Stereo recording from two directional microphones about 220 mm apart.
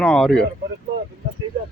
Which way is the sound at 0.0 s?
5° left (ahead or behind).